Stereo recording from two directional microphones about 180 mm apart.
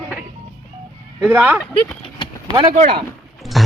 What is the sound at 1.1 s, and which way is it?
Speech, 10° right (ahead or behind).